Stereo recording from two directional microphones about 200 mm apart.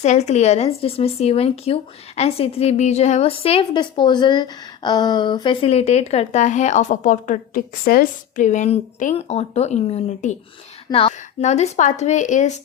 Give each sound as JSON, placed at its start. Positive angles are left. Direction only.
{"t": 0.0, "sound": "speech", "side_deg": 35}